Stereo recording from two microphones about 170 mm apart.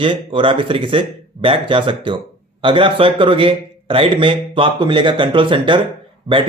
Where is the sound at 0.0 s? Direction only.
30° right (ahead or behind).